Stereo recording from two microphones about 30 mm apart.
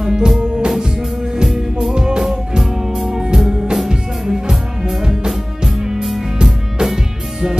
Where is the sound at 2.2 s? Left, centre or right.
Centre.